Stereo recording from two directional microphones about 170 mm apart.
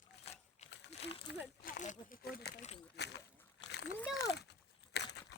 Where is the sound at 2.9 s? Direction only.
90° left.